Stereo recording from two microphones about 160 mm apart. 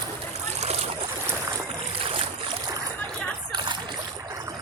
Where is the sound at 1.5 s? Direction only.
30° right (ahead or behind).